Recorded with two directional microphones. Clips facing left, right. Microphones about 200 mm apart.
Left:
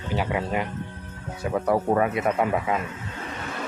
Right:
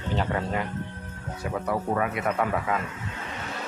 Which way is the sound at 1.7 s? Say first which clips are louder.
Left 5 dB; 35° left (ahead or behind).